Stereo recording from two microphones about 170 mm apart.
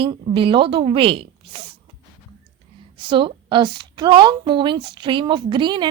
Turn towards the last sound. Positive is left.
turn(degrees=-25)  # may be behind; listen again after turning